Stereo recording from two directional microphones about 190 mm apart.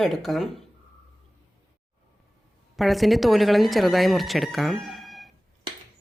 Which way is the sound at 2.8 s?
Centre (ahead or behind).